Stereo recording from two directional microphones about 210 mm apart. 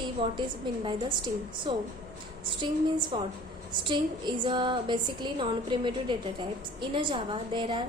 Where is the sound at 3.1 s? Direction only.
20° right (ahead or behind).